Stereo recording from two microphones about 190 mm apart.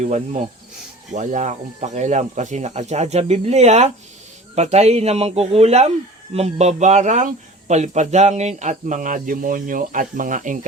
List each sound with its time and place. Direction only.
1.1 s a man's voice: 40° right (ahead or behind)